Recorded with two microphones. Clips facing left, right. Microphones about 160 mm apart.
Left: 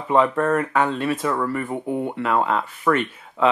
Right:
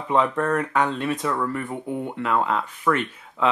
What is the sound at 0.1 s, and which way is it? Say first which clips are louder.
Speech: left 3 dB; 5° left (ahead or behind).